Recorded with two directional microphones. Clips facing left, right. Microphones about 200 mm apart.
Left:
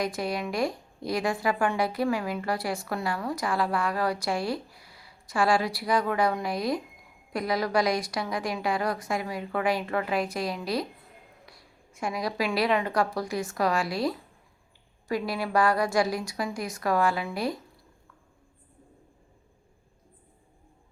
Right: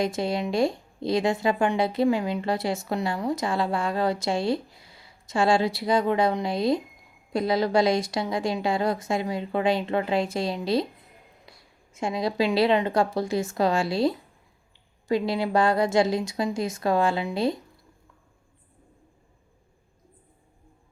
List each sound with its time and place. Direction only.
0.0 s speech: 25° right (ahead or behind)